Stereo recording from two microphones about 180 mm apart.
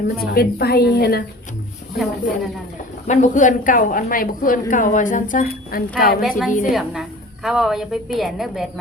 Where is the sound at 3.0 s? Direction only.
40° left (ahead or behind).